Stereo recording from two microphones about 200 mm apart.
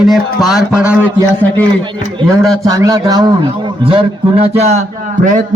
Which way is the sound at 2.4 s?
15° right (ahead or behind).